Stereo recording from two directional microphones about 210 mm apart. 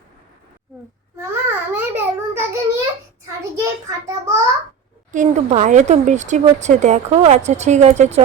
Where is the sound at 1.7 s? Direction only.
10° right (ahead or behind).